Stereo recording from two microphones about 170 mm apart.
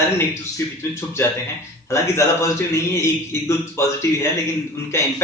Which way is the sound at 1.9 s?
15° left (ahead or behind).